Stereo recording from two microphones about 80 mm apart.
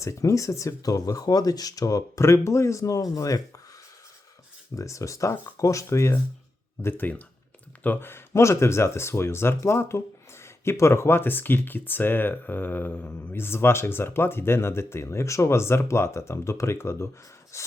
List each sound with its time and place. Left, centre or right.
0.0 s speech: left
4.8 s speech: left
6.8 s speech: left